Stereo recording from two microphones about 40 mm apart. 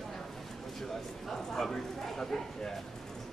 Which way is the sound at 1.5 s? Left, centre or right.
Centre.